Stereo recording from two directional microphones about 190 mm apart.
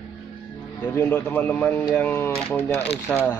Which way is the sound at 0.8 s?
10° left (ahead or behind).